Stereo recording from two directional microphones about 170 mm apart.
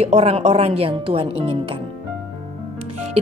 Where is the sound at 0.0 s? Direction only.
35° right (ahead or behind).